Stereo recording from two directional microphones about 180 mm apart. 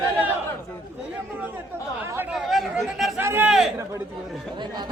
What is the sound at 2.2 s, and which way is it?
Chatter, centre (ahead or behind).